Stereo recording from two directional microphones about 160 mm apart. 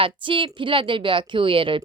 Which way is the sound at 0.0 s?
30° right (ahead or behind).